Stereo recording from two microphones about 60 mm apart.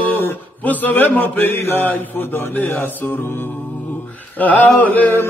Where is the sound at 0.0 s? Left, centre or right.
Left.